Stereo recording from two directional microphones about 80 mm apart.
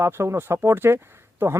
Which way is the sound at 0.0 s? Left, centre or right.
Right.